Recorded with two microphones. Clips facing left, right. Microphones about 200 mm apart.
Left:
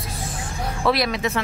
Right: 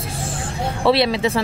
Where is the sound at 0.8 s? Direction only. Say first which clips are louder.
Right 5 dB; 30° right (ahead or behind).